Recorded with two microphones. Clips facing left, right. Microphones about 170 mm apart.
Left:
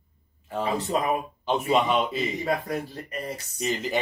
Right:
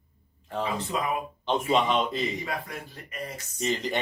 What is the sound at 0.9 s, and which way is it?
Speech, 40° left (ahead or behind).